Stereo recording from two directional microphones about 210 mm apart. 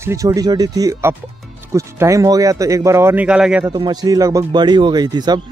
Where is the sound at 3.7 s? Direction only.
20° right (ahead or behind).